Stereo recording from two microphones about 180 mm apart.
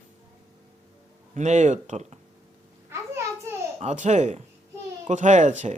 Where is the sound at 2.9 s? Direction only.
15° right (ahead or behind).